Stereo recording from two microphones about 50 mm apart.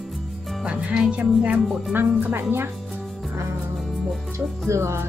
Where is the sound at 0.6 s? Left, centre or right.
Right.